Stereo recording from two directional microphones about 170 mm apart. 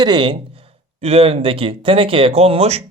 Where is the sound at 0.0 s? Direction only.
25° right (ahead or behind).